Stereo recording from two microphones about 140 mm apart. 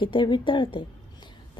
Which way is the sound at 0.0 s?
35° left (ahead or behind).